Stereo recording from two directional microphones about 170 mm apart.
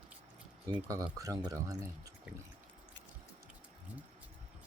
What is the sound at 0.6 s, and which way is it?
Speech, 20° right (ahead or behind).